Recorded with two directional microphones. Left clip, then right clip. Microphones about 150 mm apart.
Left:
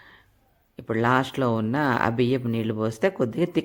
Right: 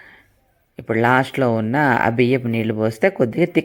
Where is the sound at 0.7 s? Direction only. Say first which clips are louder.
Right 6 dB; 15° right (ahead or behind).